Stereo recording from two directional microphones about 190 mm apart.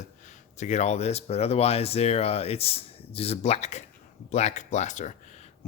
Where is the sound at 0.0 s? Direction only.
40° left (ahead or behind).